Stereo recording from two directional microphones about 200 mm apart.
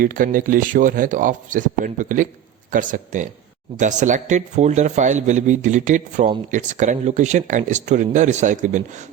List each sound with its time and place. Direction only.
0.0 s speech: 45° right (ahead or behind)